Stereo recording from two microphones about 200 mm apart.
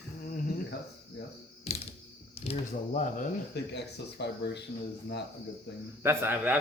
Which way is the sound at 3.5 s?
60° left (ahead or behind).